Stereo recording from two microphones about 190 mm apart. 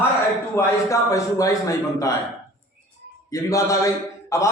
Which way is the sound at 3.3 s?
15° left (ahead or behind).